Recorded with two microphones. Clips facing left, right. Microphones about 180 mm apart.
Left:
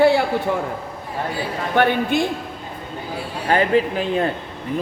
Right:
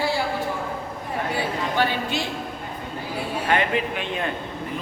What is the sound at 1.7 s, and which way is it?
Speech, 55° left (ahead or behind).